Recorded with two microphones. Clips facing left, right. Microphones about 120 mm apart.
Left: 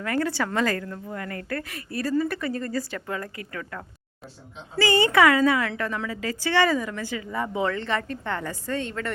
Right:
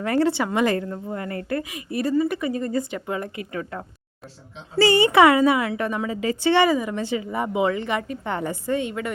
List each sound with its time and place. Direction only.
0.0 s a woman's voice: 25° right (ahead or behind)